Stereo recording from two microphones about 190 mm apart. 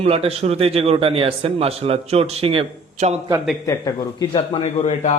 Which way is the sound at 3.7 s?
20° left (ahead or behind).